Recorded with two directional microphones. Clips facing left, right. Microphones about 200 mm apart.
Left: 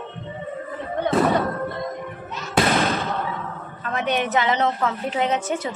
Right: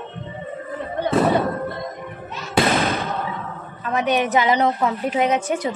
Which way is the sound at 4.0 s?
15° right (ahead or behind).